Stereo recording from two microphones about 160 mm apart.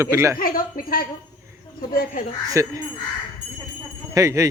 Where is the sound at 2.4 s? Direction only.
20° right (ahead or behind).